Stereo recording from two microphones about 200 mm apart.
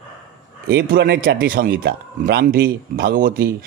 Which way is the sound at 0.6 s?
55° right (ahead or behind).